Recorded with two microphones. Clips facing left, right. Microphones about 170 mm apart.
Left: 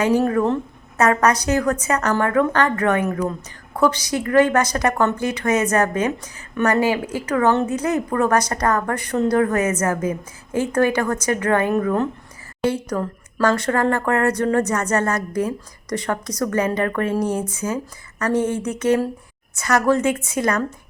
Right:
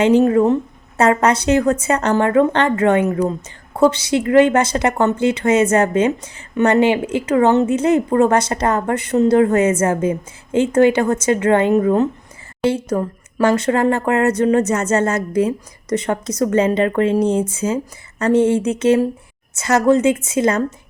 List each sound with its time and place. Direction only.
0.0 s a woman's voice: 25° right (ahead or behind)